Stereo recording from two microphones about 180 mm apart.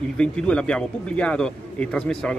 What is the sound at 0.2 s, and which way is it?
Speech, 5° left (ahead or behind).